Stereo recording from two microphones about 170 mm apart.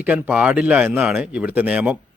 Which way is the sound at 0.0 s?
10° right (ahead or behind).